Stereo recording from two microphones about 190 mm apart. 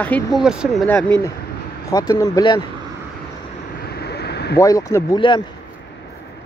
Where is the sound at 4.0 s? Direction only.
60° left (ahead or behind).